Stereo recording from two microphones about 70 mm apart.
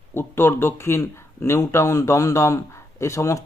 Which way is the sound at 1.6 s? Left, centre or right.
Left.